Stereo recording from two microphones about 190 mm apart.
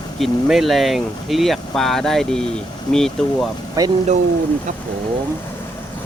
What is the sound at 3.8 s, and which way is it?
Speech, 15° right (ahead or behind).